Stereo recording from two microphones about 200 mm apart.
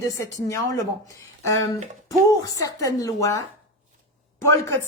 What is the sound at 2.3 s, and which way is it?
A woman's voice, 15° left (ahead or behind).